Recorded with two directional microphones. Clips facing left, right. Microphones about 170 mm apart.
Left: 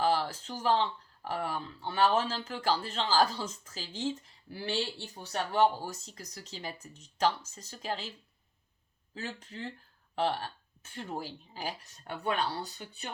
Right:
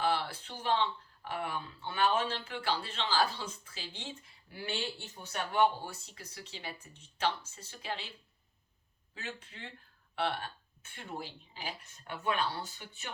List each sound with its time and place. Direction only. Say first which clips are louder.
0.0 s speech: left 3 dB; 40° left (ahead or behind)
9.1 s speech: left 5 dB; 40° left (ahead or behind)